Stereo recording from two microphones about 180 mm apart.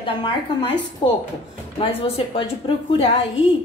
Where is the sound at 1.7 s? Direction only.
30° left (ahead or behind).